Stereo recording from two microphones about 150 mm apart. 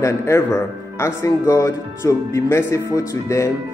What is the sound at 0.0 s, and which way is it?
Speech, 20° left (ahead or behind).